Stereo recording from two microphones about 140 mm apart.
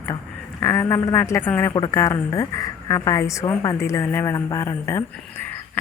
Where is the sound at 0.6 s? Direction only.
20° left (ahead or behind).